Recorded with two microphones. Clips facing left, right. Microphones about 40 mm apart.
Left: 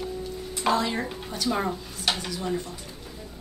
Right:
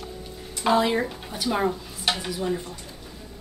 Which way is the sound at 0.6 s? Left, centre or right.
Centre.